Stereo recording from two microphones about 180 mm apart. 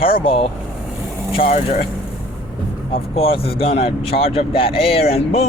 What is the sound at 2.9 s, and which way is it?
Speech, 30° left (ahead or behind).